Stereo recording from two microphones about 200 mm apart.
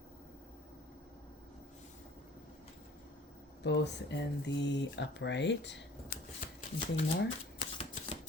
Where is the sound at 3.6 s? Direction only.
60° left (ahead or behind).